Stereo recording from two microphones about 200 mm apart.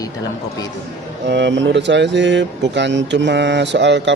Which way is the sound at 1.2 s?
60° right (ahead or behind).